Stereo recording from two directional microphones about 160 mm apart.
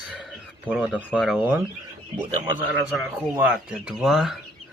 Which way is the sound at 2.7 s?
5° right (ahead or behind).